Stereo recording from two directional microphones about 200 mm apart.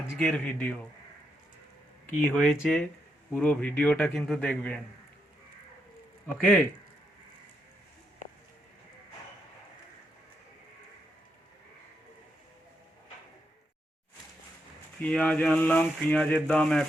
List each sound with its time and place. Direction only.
0.2 s speech: 5° left (ahead or behind)
2.3 s speech: 5° left (ahead or behind)
6.3 s speech: centre (ahead or behind)
15.0 s speech: 5° left (ahead or behind)